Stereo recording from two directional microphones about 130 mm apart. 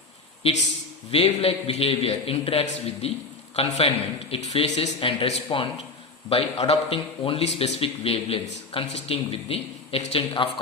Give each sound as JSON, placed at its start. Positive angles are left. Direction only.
{"t": 1.1, "sound": "a man's voice", "side_deg": 50}
{"t": 4.9, "sound": "a man's voice", "side_deg": 40}